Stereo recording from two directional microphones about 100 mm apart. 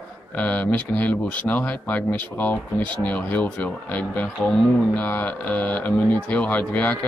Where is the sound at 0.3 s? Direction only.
15° left (ahead or behind).